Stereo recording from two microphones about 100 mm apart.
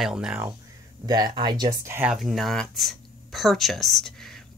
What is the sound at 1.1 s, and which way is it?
Speech, 45° right (ahead or behind).